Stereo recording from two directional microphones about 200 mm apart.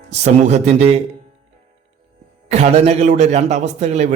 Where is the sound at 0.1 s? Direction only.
35° right (ahead or behind).